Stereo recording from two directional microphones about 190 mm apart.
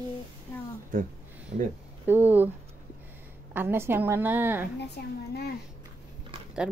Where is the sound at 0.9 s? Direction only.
45° right (ahead or behind).